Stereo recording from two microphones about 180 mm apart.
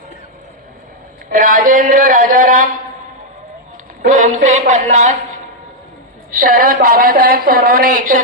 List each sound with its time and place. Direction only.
1.3 s speech: 50° right (ahead or behind)
4.0 s speech: 45° right (ahead or behind)
6.3 s speech: 50° right (ahead or behind)